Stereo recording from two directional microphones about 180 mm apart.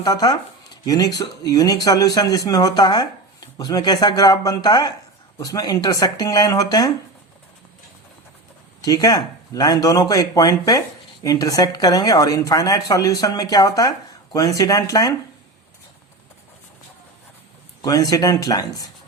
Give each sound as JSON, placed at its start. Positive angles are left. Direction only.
{"t": 0.0, "sound": "speech", "side_deg": 20}
{"t": 8.8, "sound": "speech", "side_deg": 20}
{"t": 17.8, "sound": "speech", "side_deg": 20}